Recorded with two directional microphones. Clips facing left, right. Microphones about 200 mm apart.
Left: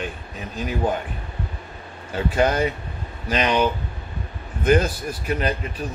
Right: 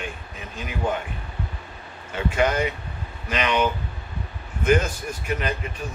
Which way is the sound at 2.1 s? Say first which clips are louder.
Left 2 dB; 35° left (ahead or behind).